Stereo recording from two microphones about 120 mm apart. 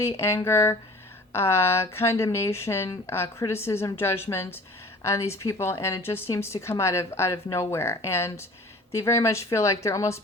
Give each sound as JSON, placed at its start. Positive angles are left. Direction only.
{"t": 0.2, "sound": "speech", "side_deg": 25}